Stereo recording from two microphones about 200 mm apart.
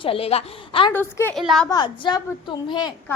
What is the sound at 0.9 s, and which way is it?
Speech, 10° left (ahead or behind).